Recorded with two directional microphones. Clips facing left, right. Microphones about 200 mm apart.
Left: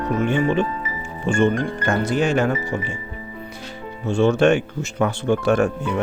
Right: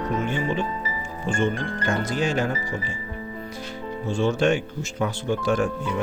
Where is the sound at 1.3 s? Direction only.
70° left (ahead or behind).